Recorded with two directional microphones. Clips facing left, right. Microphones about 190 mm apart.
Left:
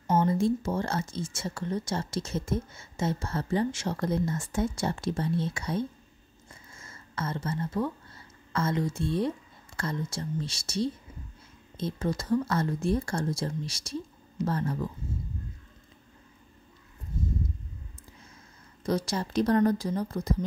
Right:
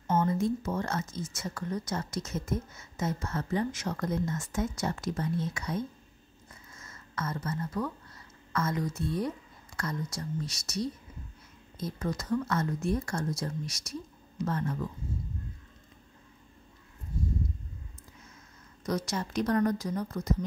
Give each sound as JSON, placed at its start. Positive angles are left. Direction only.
{"t": 0.2, "sound": "speech", "side_deg": 30}
{"t": 18.9, "sound": "speech", "side_deg": 30}